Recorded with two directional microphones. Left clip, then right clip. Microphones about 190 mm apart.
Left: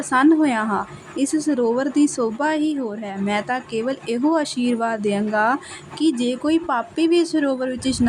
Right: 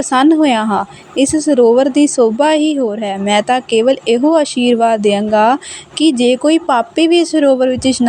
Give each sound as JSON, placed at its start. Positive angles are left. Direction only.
{"t": 0.1, "sound": "a woman's voice", "side_deg": -30}